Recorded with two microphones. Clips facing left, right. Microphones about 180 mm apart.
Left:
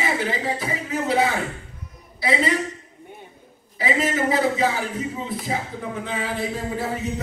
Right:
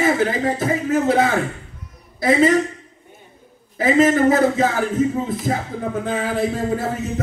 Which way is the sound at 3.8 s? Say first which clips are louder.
Right 8 dB; 45° right (ahead or behind).